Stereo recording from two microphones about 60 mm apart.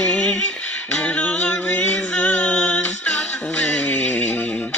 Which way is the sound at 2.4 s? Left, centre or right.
Centre.